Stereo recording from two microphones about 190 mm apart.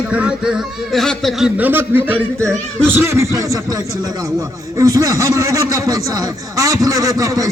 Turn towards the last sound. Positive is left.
turn(degrees=-15)  # may be behind; listen again after turning